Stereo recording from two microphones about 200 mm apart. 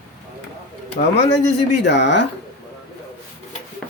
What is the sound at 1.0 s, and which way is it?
Speech, 45° left (ahead or behind).